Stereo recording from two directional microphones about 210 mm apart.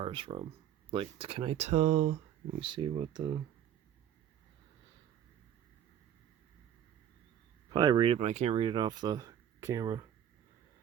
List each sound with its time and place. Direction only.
0.0 s speech: 25° right (ahead or behind)
7.7 s speech: 20° right (ahead or behind)